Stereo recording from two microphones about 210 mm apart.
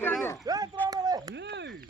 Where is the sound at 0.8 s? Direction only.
20° right (ahead or behind).